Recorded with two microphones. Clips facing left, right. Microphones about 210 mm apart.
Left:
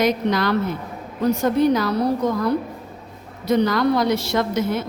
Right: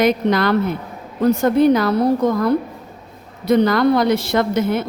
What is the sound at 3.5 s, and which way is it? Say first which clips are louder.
A woman's voice: right 4 dB; 55° right (ahead or behind).